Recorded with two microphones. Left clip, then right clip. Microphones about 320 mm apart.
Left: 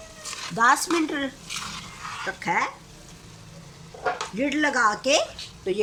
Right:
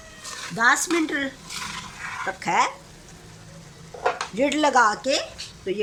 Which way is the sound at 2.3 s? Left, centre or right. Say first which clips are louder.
Right 3 dB; centre.